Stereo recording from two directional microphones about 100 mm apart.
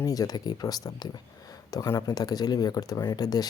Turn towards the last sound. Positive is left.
turn(degrees=40)  # may be behind; listen again after turning